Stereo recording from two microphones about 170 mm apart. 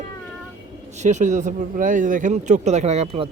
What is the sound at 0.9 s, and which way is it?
A man's voice, 45° right (ahead or behind).